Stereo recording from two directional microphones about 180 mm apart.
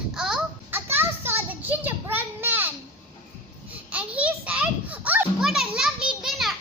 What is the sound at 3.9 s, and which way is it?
Children playing, 5° right (ahead or behind).